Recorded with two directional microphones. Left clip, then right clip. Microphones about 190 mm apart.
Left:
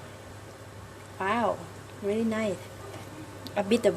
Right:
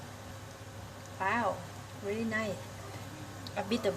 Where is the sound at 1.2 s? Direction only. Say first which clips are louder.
Left 4 dB; 40° left (ahead or behind).